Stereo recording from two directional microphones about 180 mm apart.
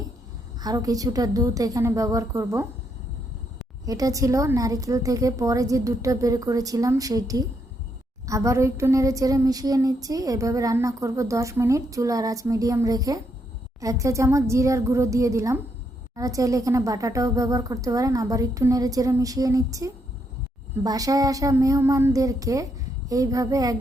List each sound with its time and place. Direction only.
0.6 s speech: 20° right (ahead or behind)
3.8 s speech: 20° right (ahead or behind)
8.3 s a sound: 15° right (ahead or behind)
16.1 s speech: 20° right (ahead or behind)